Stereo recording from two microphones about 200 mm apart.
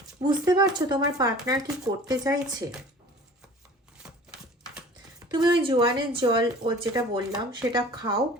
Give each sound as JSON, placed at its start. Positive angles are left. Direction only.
{"t": 0.2, "sound": "speech", "side_deg": -20}
{"t": 5.3, "sound": "speech", "side_deg": -20}